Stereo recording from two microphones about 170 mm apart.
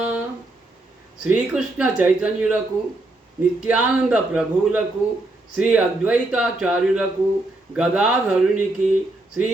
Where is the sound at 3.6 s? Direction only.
5° right (ahead or behind).